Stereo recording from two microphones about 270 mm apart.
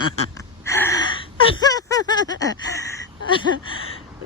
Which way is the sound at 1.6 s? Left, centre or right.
Centre.